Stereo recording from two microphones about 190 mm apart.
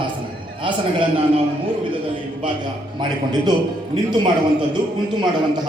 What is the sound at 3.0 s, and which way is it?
Speech, 20° right (ahead or behind).